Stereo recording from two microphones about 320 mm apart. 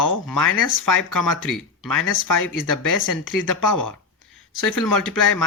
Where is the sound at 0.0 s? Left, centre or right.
Left.